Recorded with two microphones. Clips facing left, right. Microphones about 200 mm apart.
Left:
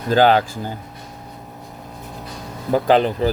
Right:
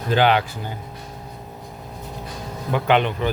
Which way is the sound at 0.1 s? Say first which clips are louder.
Left 4 dB; 40° left (ahead or behind).